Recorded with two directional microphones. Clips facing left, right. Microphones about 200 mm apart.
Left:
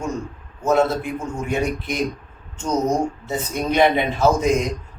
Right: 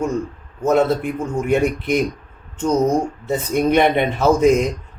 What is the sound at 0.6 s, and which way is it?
Speech, 55° right (ahead or behind).